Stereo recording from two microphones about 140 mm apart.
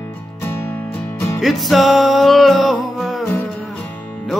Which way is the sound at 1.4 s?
Centre (ahead or behind).